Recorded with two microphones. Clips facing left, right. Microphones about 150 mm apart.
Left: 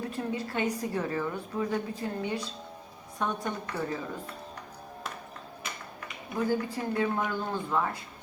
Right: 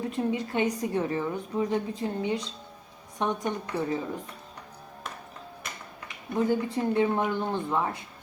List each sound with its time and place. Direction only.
0.0 s a woman's voice: 20° right (ahead or behind)
6.3 s a woman's voice: 20° right (ahead or behind)